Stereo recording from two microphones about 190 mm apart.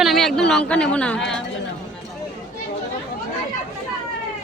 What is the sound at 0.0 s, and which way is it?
Speech, centre (ahead or behind).